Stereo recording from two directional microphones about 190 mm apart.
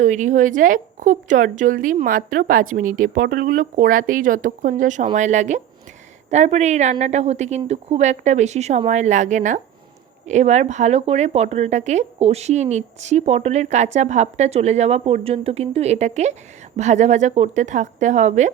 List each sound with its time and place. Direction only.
0.0 s speech: 40° right (ahead or behind)